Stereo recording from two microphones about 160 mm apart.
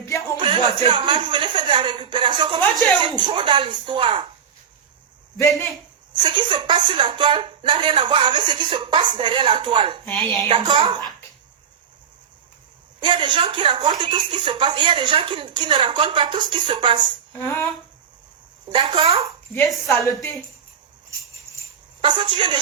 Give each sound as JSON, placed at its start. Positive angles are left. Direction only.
{"t": 0.3, "sound": "speech", "side_deg": -30}
{"t": 6.2, "sound": "speech", "side_deg": -30}
{"t": 13.0, "sound": "speech", "side_deg": -30}
{"t": 17.3, "sound": "a sound", "side_deg": 15}
{"t": 18.7, "sound": "speech", "side_deg": -35}
{"t": 19.6, "sound": "a woman's voice", "side_deg": 0}
{"t": 22.0, "sound": "speech", "side_deg": -30}